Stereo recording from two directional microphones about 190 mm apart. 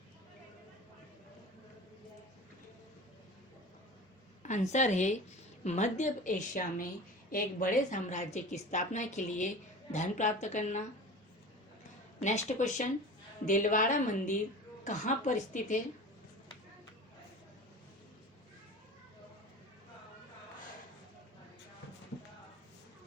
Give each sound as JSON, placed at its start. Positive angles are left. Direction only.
{"t": 4.4, "sound": "a woman's voice", "side_deg": 40}
{"t": 12.2, "sound": "a woman's voice", "side_deg": 40}